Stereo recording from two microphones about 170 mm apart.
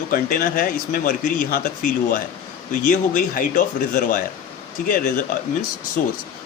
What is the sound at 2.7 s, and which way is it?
Speech, 50° left (ahead or behind).